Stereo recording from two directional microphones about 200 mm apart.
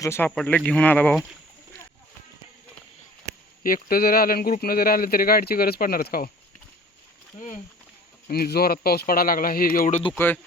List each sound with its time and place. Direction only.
0.0 s speech: 10° left (ahead or behind)
3.6 s speech: 45° left (ahead or behind)
8.3 s speech: 50° left (ahead or behind)
10.2 s speech: 10° left (ahead or behind)